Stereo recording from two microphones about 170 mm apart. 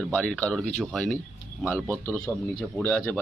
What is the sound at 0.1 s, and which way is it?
Speech, 5° left (ahead or behind).